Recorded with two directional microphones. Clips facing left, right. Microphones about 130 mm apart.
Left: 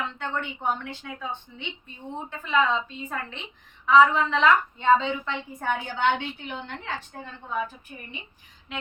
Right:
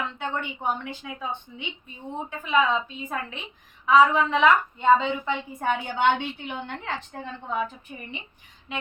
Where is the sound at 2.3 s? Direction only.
10° right (ahead or behind).